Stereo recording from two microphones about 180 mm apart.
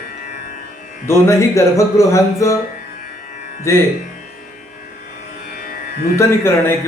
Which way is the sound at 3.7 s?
15° left (ahead or behind).